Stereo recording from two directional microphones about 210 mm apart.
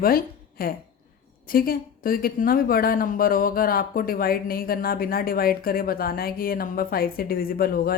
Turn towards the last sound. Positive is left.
turn(degrees=45)  # may be behind; listen again after turning